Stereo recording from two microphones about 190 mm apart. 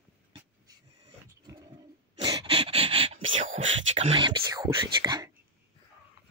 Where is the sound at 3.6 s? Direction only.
90° right.